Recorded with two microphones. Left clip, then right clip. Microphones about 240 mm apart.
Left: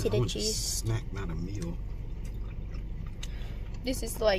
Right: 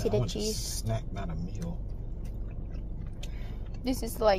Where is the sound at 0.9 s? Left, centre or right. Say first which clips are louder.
Right 2 dB; left.